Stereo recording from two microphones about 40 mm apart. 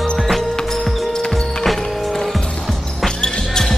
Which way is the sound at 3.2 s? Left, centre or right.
Centre.